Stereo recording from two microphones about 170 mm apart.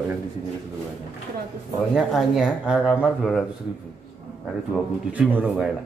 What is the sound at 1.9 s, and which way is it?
A man's voice, centre (ahead or behind).